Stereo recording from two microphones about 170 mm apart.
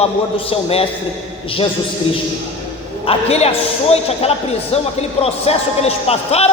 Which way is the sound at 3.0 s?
35° left (ahead or behind).